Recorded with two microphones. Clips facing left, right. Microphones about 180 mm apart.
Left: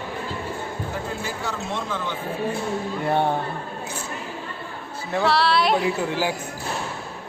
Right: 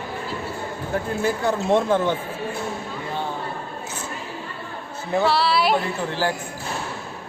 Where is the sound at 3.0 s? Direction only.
60° left (ahead or behind).